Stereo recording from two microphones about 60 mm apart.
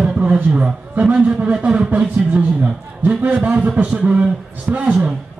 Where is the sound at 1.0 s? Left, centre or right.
Centre.